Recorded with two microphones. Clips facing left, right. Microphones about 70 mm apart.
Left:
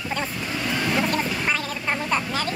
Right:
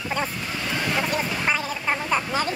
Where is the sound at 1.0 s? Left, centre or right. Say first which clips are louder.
Left 1 dB; centre.